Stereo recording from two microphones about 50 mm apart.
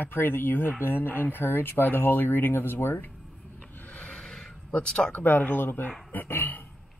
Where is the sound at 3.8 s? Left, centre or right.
Left.